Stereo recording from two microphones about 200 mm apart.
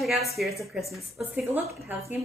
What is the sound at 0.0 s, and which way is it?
A woman's voice, centre (ahead or behind).